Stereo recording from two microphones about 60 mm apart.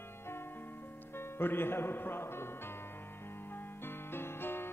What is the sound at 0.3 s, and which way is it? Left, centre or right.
Music, left.